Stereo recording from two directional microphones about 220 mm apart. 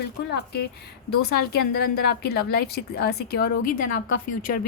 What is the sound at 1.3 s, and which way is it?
A woman's voice, 50° left (ahead or behind).